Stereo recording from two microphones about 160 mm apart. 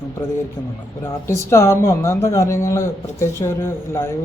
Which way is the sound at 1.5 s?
15° left (ahead or behind).